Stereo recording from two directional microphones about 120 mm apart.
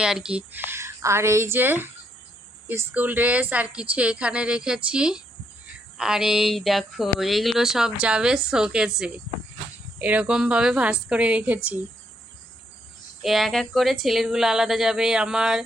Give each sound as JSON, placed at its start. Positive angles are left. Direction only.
{"t": 0.0, "sound": "a woman's voice", "side_deg": -5}
{"t": 13.2, "sound": "speech", "side_deg": 0}